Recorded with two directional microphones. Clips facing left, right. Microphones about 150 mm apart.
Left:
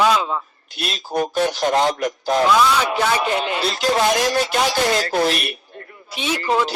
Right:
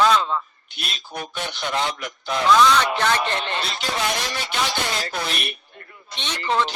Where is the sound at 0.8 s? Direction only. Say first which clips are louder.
Left 11 dB; 40° left (ahead or behind).